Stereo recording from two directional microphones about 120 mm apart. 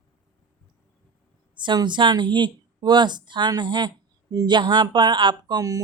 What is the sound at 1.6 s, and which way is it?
Speech, 40° right (ahead or behind).